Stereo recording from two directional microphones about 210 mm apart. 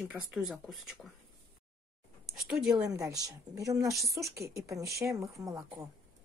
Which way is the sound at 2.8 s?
15° right (ahead or behind).